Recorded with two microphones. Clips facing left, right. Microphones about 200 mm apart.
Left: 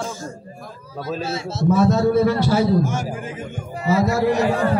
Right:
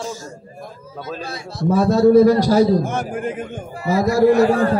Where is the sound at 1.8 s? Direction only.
40° right (ahead or behind).